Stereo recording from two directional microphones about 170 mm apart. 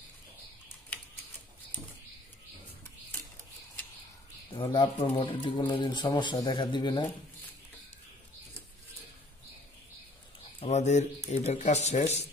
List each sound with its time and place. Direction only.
4.5 s speech: 30° left (ahead or behind)
10.6 s speech: 40° left (ahead or behind)